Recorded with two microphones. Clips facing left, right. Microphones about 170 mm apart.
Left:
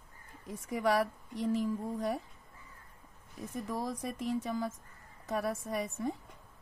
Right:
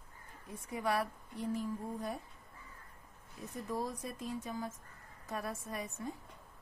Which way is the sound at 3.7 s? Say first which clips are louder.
Left 1 dB; 85° left.